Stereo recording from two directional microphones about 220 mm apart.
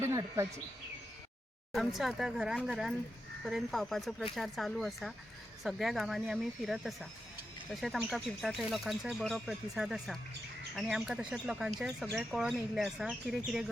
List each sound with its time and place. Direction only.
0.0 s speech: 15° right (ahead or behind)
1.7 s speech: centre (ahead or behind)